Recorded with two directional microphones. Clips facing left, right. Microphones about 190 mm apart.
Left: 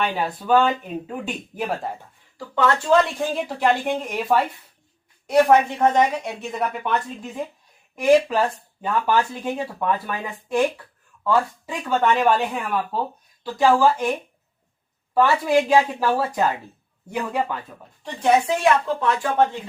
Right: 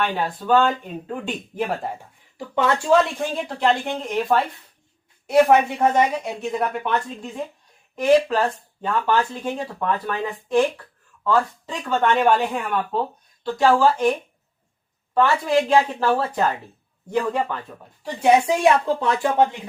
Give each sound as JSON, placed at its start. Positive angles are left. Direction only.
{"t": 0.0, "sound": "speech", "side_deg": 10}
{"t": 2.4, "sound": "a woman's voice", "side_deg": -15}
{"t": 2.9, "sound": "speech", "side_deg": 0}
{"t": 5.2, "sound": "speech", "side_deg": -5}
{"t": 15.1, "sound": "speech", "side_deg": 10}
{"t": 18.0, "sound": "a woman's voice", "side_deg": -15}